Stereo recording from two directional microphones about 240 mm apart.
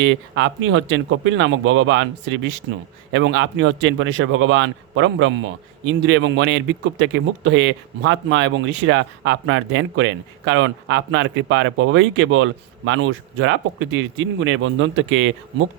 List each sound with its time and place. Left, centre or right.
0.0 s speech: right